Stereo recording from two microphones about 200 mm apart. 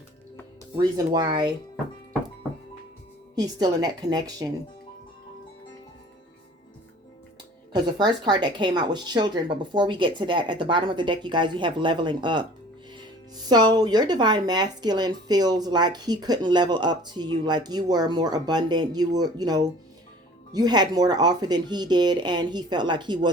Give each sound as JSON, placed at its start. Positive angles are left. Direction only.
{"t": 0.8, "sound": "speech", "side_deg": -20}
{"t": 3.3, "sound": "speech", "side_deg": -20}
{"t": 7.7, "sound": "speech", "side_deg": -20}